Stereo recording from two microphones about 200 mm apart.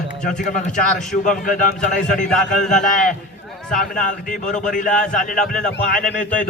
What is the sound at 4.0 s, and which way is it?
A man's voice, 40° left (ahead or behind).